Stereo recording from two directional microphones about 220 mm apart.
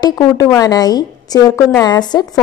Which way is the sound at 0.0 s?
15° left (ahead or behind).